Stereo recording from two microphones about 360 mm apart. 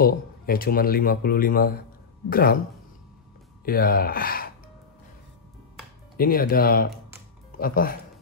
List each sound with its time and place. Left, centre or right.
0.0 s speech: left
3.6 s speech: left
6.1 s speech: left